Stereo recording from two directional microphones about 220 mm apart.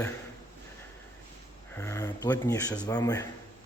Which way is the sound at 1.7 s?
15° left (ahead or behind).